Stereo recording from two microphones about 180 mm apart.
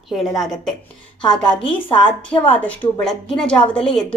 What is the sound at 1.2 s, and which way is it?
Speech, 25° left (ahead or behind).